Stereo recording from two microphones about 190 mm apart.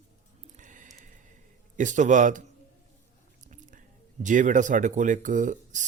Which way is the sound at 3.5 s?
40° right (ahead or behind).